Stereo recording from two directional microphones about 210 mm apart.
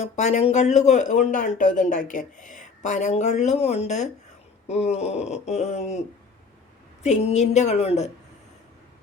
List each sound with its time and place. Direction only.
0.0 s speech: 30° left (ahead or behind)
7.0 s speech: 35° left (ahead or behind)